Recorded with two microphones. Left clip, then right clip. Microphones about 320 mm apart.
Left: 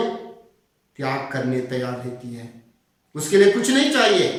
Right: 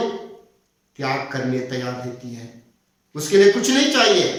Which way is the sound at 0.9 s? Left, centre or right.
Centre.